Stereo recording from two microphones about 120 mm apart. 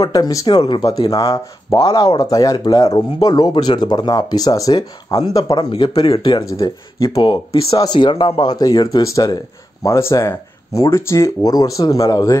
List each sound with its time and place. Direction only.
0.0 s speech: 30° left (ahead or behind)